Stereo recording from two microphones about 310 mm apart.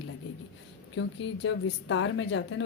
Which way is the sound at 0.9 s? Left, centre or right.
Left.